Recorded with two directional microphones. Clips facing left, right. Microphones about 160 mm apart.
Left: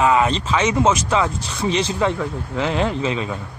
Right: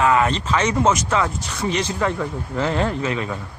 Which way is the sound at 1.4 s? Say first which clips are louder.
Left 2 dB; 25° left (ahead or behind).